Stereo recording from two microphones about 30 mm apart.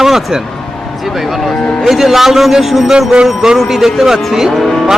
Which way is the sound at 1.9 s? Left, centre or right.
Centre.